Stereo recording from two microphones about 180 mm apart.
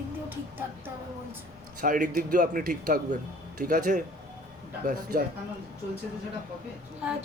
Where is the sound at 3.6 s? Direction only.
45° right (ahead or behind).